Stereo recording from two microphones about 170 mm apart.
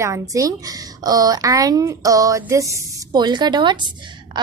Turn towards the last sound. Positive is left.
turn(degrees=-25)  # may be behind; listen again after turning